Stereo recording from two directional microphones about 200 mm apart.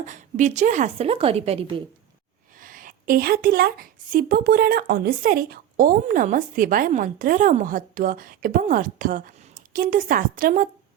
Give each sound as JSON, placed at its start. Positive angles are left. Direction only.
{"t": 0.0, "sound": "a woman's voice", "side_deg": -40}
{"t": 2.6, "sound": "a woman's voice", "side_deg": -45}